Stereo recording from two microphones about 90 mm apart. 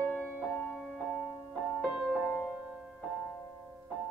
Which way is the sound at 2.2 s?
15° left (ahead or behind).